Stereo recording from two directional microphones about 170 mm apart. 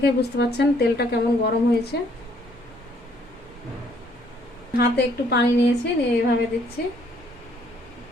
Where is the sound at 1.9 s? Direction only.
90° left.